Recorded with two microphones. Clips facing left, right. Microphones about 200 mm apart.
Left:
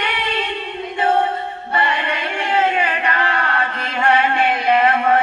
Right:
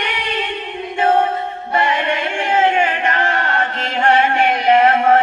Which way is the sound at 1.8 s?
50° right (ahead or behind).